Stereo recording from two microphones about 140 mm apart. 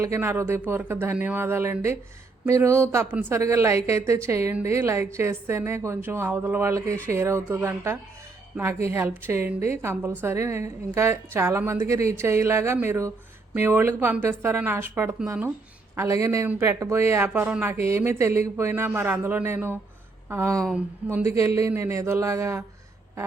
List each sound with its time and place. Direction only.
0.0 s a woman's voice: 20° right (ahead or behind)